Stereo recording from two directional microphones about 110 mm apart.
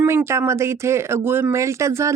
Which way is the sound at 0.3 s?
25° right (ahead or behind).